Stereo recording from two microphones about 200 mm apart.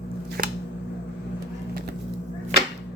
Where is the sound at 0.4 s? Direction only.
45° right (ahead or behind).